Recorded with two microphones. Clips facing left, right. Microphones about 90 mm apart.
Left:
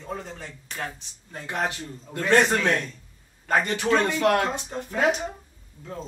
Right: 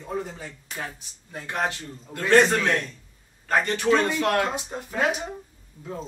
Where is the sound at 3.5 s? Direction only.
20° left (ahead or behind).